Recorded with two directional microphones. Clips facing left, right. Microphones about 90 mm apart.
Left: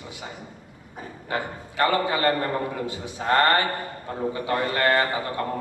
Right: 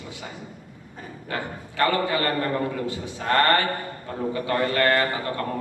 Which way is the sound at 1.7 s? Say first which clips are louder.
Even; 20° left (ahead or behind).